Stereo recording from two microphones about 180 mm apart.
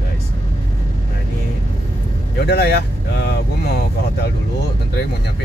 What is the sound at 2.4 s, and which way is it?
Speech, 65° left (ahead or behind).